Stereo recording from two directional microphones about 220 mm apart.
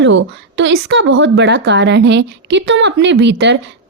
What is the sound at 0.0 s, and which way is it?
A woman's voice, 55° right (ahead or behind).